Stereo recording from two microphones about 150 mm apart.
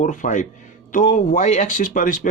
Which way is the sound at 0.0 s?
60° left (ahead or behind).